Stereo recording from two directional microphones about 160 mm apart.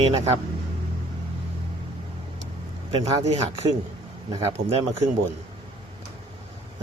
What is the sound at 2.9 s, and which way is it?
Speech, 40° right (ahead or behind).